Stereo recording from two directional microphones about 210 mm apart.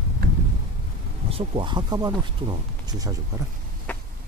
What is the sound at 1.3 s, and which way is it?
Speech, 25° right (ahead or behind).